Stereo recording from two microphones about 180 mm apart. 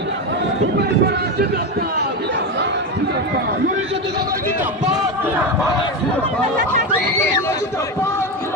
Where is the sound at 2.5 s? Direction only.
75° right (ahead or behind).